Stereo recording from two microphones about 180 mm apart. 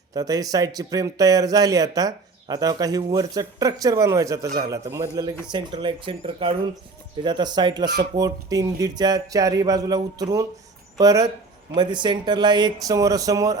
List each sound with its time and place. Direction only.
0.1 s speech: 20° right (ahead or behind)